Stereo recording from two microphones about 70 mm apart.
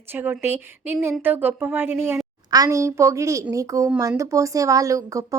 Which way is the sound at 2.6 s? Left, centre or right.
Right.